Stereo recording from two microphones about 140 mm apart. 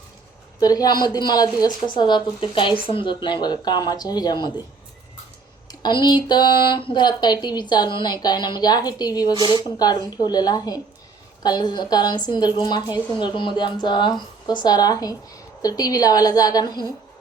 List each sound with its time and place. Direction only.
0.6 s speech: 25° left (ahead or behind)
5.6 s a woman's voice: 30° left (ahead or behind)